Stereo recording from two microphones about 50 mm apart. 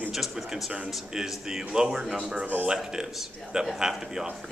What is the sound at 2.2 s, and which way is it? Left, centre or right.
A man's voice, centre.